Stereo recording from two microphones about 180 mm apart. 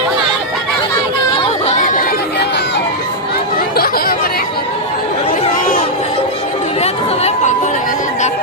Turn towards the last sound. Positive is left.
turn(degrees=40)  # may be behind; listen again after turning